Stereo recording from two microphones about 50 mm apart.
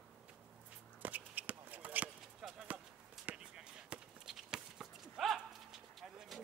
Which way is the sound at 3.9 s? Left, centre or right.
Right.